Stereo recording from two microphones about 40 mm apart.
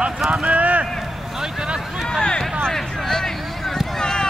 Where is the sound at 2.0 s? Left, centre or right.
Centre.